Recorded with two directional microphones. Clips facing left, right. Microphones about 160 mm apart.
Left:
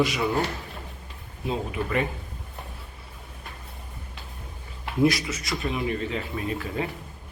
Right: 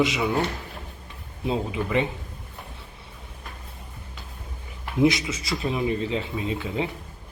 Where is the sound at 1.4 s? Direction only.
20° right (ahead or behind).